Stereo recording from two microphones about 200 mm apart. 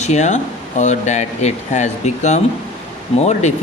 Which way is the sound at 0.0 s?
35° left (ahead or behind).